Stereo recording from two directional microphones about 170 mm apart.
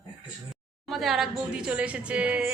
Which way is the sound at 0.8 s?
Centre (ahead or behind).